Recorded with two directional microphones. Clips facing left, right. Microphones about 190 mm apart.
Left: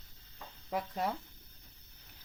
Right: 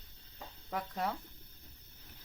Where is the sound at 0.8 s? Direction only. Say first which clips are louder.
Left 2 dB; 20° left (ahead or behind).